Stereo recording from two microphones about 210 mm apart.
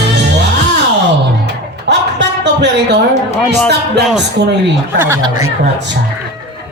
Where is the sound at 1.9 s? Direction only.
55° right (ahead or behind).